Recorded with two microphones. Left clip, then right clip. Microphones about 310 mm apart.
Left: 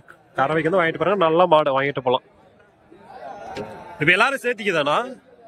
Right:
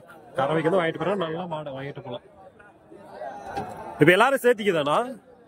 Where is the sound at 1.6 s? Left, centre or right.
Centre.